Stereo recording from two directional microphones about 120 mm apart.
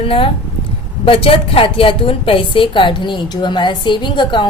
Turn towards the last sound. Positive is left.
turn(degrees=40)  # may be behind; listen again after turning